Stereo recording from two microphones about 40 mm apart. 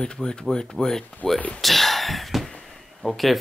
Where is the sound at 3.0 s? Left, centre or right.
Centre.